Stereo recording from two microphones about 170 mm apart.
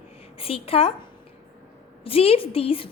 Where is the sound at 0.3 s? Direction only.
35° left (ahead or behind).